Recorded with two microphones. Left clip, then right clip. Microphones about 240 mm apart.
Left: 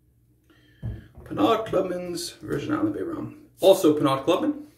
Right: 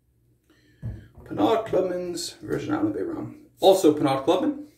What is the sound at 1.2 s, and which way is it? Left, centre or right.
Speech, centre.